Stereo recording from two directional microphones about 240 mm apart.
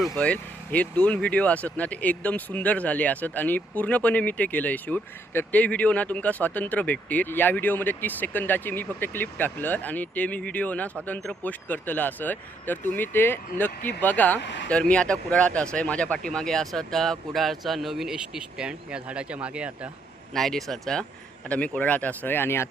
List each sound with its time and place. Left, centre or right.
0.2 s speech: centre
14.4 s speech: left
14.7 s speech: centre